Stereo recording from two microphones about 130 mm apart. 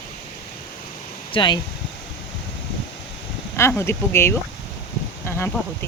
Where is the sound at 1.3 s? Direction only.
40° left (ahead or behind).